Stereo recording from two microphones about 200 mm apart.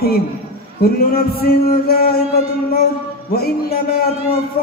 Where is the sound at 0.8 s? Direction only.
50° left (ahead or behind).